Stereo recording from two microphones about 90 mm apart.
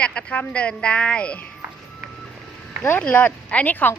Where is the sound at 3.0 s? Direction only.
15° left (ahead or behind).